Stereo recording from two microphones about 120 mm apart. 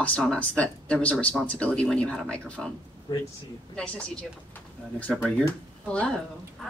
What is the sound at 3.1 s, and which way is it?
Speech, 35° left (ahead or behind).